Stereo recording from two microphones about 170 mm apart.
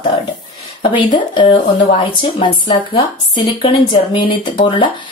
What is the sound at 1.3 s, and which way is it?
Speech, 30° left (ahead or behind).